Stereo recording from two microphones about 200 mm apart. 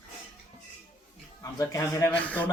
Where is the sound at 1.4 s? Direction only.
15° left (ahead or behind).